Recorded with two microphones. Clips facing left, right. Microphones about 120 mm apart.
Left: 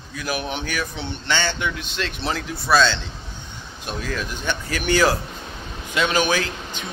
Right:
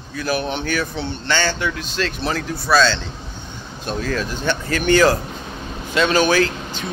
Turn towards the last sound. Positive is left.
turn(degrees=15)  # may be behind; listen again after turning